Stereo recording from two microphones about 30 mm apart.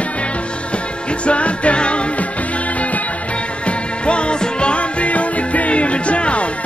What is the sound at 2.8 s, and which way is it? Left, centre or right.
Music, left.